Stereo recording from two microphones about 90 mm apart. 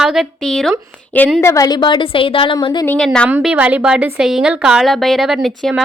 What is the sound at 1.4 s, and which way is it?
Speech, 30° left (ahead or behind).